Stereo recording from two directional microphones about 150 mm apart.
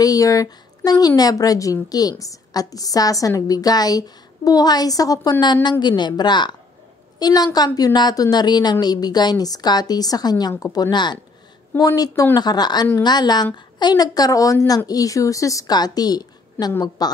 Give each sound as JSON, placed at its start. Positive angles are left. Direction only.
{"t": 0.0, "sound": "a woman's voice", "side_deg": 25}